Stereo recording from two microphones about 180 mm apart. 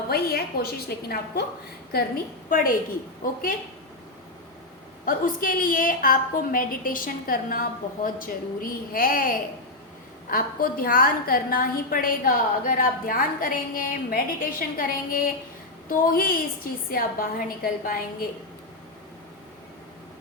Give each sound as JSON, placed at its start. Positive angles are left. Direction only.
{"t": 0.1, "sound": "a woman's voice", "side_deg": 60}
{"t": 3.2, "sound": "a woman's voice", "side_deg": 55}
{"t": 5.0, "sound": "a woman's voice", "side_deg": 50}